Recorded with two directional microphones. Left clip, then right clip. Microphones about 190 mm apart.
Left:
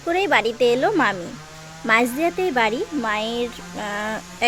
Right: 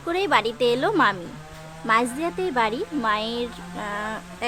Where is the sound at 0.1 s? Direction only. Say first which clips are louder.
Left 3 dB; 5° left (ahead or behind).